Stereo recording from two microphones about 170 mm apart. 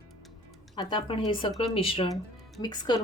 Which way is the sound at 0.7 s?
25° left (ahead or behind).